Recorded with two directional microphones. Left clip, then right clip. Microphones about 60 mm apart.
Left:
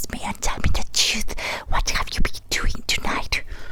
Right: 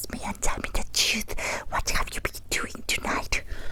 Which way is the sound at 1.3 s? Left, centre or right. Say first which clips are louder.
Left 3 dB; centre.